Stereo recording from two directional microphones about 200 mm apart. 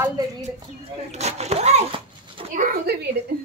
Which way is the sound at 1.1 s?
35° right (ahead or behind).